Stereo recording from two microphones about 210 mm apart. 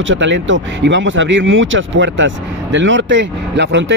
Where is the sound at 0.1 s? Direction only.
60° right (ahead or behind).